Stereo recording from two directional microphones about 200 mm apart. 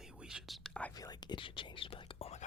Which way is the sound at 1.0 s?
20° left (ahead or behind).